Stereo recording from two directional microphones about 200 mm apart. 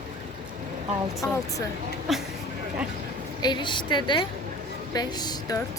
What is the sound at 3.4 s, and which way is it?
A woman's voice, 25° left (ahead or behind).